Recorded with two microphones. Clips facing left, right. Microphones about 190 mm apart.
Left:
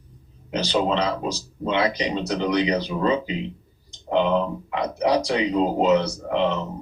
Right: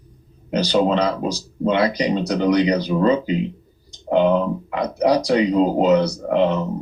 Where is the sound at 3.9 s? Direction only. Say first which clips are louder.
Right 5 dB; 40° right (ahead or behind).